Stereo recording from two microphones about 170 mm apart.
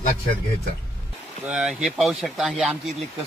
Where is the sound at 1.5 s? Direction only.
5° right (ahead or behind).